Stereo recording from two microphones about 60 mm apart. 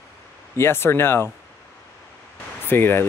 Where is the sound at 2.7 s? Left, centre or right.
Left.